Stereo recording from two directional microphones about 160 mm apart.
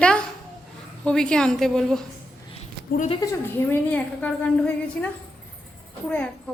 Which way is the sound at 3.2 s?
20° left (ahead or behind).